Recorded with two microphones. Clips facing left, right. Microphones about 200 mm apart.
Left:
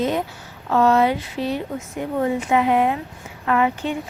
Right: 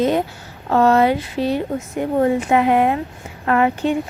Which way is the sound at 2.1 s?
55° right (ahead or behind).